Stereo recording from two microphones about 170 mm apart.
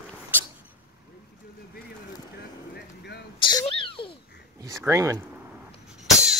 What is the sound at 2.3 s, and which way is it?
Vehicle, 80° left.